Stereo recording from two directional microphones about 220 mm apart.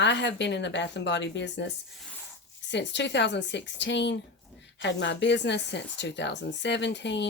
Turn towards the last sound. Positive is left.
turn(degrees=55)  # may be behind; listen again after turning